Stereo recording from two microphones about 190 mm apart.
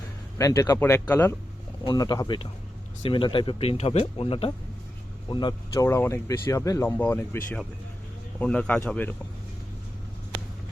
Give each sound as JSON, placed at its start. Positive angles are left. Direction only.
{"t": 0.3, "sound": "speech", "side_deg": 15}
{"t": 1.8, "sound": "speech", "side_deg": 20}